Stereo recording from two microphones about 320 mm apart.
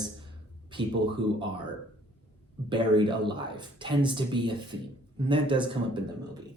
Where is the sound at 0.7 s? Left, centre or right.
Centre.